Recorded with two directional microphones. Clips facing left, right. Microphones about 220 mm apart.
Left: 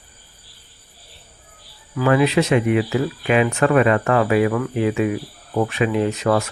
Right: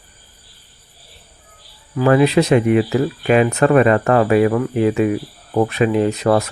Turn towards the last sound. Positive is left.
turn(degrees=-35)  # may be behind; listen again after turning